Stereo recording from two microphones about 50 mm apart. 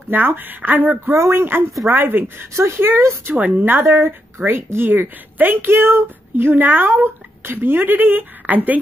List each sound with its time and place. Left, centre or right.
0.1 s a woman's voice: right
1.3 s a woman's voice: right
2.5 s speech: right
3.3 s a woman's voice: right
3.9 s a woman's voice: right